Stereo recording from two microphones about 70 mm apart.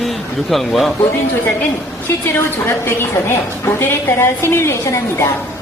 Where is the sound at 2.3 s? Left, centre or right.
Left.